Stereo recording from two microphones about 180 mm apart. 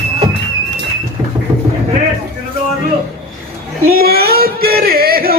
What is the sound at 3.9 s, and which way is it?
Music, 60° right (ahead or behind).